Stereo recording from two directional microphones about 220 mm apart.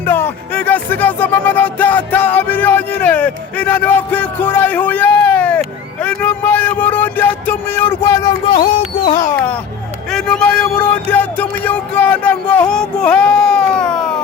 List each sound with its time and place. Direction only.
0.0 s speech: 10° left (ahead or behind)
8.7 s a sound: 20° left (ahead or behind)
10.1 s speech: 5° left (ahead or behind)